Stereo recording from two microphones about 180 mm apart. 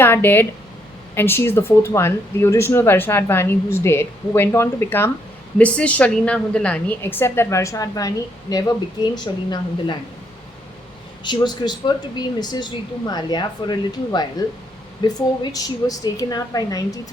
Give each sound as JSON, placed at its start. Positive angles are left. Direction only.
{"t": 0.0, "sound": "speech", "side_deg": 10}
{"t": 11.2, "sound": "speech", "side_deg": 25}